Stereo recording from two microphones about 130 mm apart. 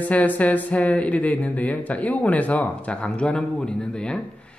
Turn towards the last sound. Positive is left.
turn(degrees=5)  # may be behind; listen again after turning